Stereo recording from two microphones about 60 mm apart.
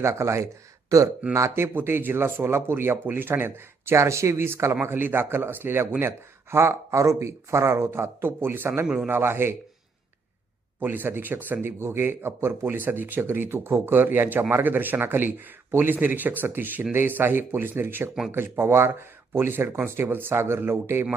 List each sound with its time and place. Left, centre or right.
0.0 s speech: right
0.9 s speech: right
1.3 s speech: right
10.8 s speech: right